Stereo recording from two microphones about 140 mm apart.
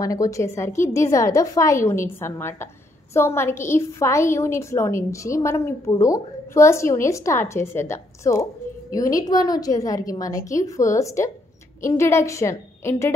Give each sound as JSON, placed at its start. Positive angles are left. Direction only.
{"t": 0.0, "sound": "a woman's voice", "side_deg": 25}